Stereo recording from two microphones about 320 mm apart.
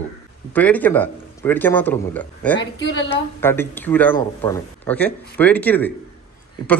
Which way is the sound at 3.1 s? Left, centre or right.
Centre.